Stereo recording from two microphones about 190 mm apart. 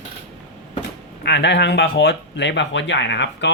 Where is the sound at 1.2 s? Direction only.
65° left (ahead or behind).